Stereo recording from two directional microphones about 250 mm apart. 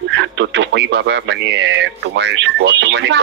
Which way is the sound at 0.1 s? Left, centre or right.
Right.